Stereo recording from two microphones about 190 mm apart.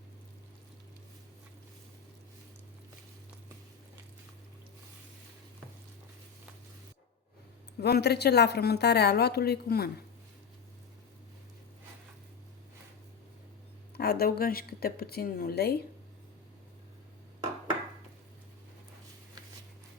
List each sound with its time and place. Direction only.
7.8 s a woman's voice: 55° left (ahead or behind)
13.9 s speech: 55° left (ahead or behind)